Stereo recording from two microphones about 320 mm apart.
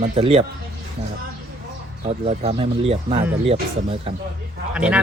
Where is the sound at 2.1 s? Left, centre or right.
Centre.